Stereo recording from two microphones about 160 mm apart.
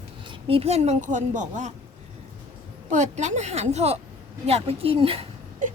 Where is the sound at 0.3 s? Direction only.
35° right (ahead or behind).